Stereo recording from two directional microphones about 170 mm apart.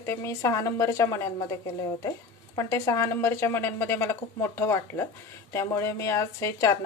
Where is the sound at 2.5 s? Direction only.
20° left (ahead or behind).